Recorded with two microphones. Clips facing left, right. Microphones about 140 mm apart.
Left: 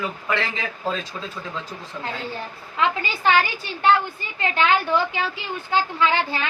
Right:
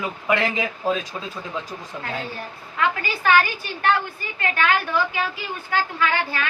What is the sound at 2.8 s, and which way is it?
Speech, 25° left (ahead or behind).